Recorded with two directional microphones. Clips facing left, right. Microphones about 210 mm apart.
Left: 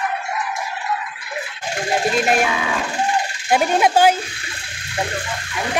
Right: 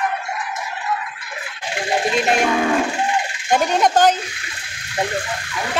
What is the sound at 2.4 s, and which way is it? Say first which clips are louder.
Music: right 5 dB; 50° right (ahead or behind).